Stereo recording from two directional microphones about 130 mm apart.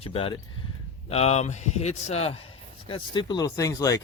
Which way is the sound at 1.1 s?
55° left (ahead or behind).